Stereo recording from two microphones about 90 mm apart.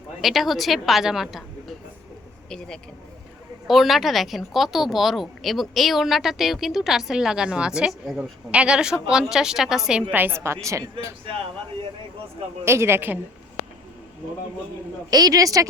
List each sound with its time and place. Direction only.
0.2 s speech: centre (ahead or behind)
3.7 s speech: centre (ahead or behind)
10.1 s a woman's voice: 20° right (ahead or behind)
12.6 s a woman's voice: 30° right (ahead or behind)
15.1 s a woman's voice: 45° right (ahead or behind)